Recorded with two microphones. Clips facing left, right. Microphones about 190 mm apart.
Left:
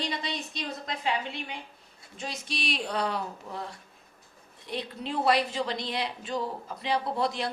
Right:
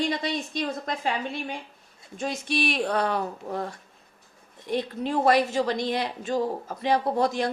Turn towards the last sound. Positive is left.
turn(degrees=-45)  # may be behind; listen again after turning